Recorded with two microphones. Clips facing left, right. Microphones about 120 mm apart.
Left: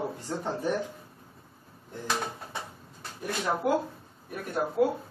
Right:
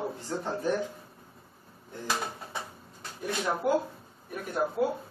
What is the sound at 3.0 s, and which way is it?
A man's voice, centre (ahead or behind).